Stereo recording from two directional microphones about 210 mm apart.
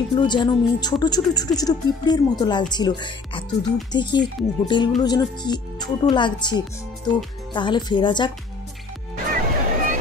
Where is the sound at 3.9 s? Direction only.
20° left (ahead or behind).